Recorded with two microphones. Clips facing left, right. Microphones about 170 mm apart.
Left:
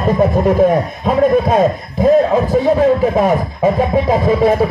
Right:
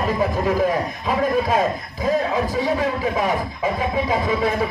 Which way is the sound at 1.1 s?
55° left (ahead or behind).